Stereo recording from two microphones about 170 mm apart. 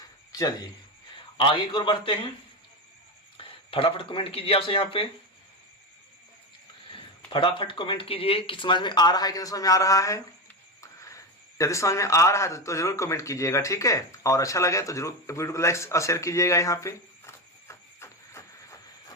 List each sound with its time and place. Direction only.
0.3 s speech: 20° left (ahead or behind)
3.3 s speech: 30° left (ahead or behind)
7.3 s speech: 30° left (ahead or behind)